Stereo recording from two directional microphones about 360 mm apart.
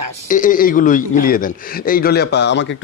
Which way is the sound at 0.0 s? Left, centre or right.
Right.